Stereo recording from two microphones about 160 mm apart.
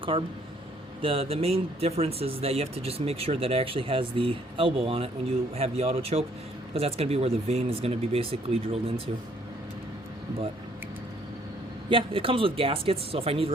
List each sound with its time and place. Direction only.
0.0 s speech: 35° right (ahead or behind)
11.9 s speech: 35° right (ahead or behind)